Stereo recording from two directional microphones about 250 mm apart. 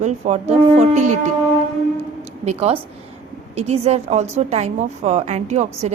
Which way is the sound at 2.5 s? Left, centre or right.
Right.